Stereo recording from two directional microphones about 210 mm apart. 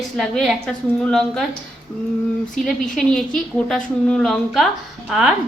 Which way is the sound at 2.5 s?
Centre (ahead or behind).